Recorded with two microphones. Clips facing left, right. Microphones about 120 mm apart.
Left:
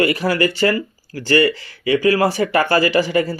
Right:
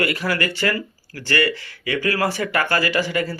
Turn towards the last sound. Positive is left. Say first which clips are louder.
# left 5 dB
turn(degrees=20)  # may be behind; listen again after turning